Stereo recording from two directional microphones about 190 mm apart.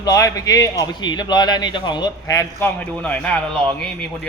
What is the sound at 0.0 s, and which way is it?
A man's voice, 20° left (ahead or behind).